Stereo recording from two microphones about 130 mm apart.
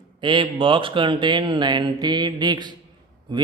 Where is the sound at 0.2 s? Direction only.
40° right (ahead or behind).